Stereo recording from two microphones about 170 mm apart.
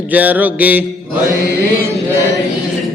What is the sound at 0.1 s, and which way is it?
Mantra, 10° right (ahead or behind).